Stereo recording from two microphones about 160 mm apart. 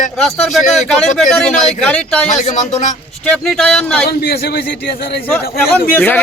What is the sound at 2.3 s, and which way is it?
Speech, 45° left (ahead or behind).